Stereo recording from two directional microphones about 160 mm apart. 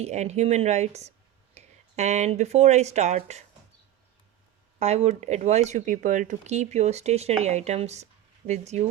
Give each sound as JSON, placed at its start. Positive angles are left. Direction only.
{"t": 0.0, "sound": "speech", "side_deg": -45}
{"t": 4.8, "sound": "speech", "side_deg": -45}